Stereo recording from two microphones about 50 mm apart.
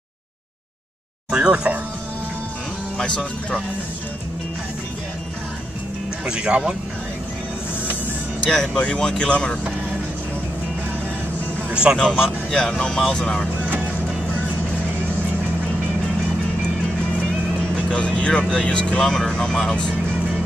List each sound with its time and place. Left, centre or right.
1.3 s speech: centre
3.0 s speech: left
6.2 s speech: right
8.5 s speech: centre
11.7 s speech: right
12.4 s speech: centre
17.8 s speech: left